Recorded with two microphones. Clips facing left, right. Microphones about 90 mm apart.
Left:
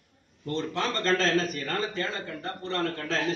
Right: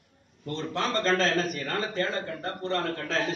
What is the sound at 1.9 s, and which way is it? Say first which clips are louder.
Speech: right 3 dB; 40° right (ahead or behind).